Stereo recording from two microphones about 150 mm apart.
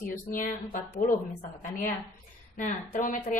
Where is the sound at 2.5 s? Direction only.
60° left (ahead or behind).